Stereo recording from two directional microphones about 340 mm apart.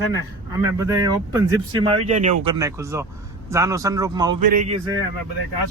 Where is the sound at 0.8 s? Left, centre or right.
Centre.